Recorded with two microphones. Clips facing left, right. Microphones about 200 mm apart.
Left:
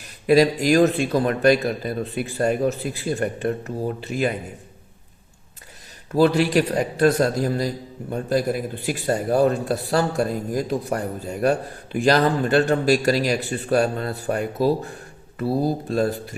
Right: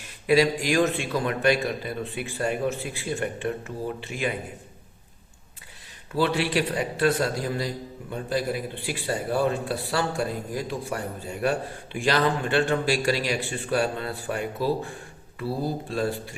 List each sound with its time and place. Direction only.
0.0 s a man's voice: 40° left (ahead or behind)
6.1 s a man's voice: 40° left (ahead or behind)